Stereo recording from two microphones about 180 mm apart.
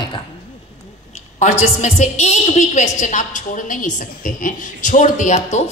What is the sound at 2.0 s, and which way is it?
A woman's voice, 40° left (ahead or behind).